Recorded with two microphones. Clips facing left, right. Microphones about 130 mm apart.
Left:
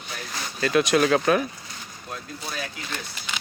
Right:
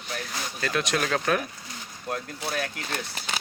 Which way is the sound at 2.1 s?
60° right (ahead or behind).